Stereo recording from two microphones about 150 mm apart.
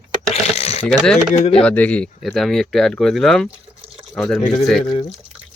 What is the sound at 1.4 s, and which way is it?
Speech, 45° left (ahead or behind).